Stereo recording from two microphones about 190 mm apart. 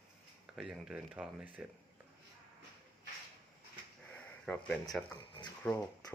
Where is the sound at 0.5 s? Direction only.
5° right (ahead or behind).